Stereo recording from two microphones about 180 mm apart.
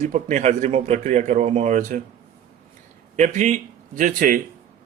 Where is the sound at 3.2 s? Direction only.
45° right (ahead or behind).